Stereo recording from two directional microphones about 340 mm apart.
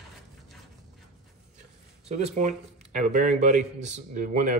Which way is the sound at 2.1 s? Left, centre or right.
Right.